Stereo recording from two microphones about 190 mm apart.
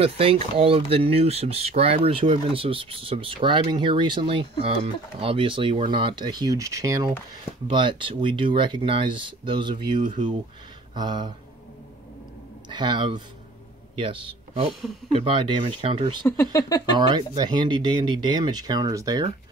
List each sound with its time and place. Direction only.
0.0 s speech: 30° right (ahead or behind)
12.6 s a man's voice: 25° right (ahead or behind)
16.3 s speech: 15° left (ahead or behind)
16.9 s speech: 25° right (ahead or behind)